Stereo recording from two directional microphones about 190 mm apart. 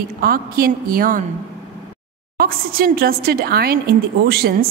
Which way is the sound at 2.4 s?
50° right (ahead or behind).